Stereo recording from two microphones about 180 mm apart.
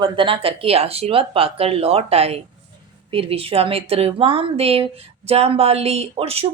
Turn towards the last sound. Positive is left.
turn(degrees=-35)  # may be behind; listen again after turning